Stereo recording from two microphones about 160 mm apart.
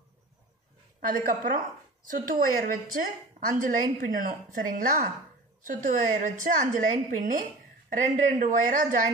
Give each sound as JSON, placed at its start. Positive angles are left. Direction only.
{"t": 1.0, "sound": "a woman's voice", "side_deg": -60}